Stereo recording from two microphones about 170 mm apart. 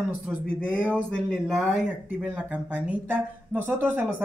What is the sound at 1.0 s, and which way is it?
Speech, 5° left (ahead or behind).